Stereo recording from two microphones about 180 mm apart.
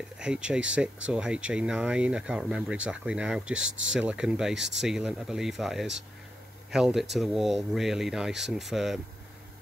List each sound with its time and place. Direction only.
0.2 s speech: 5° right (ahead or behind)